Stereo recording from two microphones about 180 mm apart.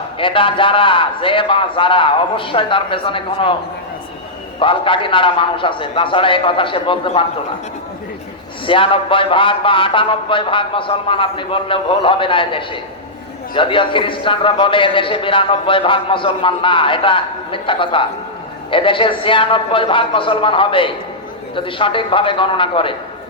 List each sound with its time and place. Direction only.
0.2 s a man's voice: 30° left (ahead or behind)
4.6 s a man's voice: 30° left (ahead or behind)
8.6 s a man's voice: 30° left (ahead or behind)